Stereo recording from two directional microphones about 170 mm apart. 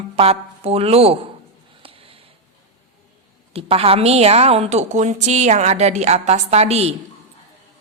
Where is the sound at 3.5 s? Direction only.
35° right (ahead or behind).